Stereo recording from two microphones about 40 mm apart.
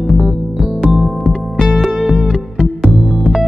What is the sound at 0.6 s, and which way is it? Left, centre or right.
Music, centre.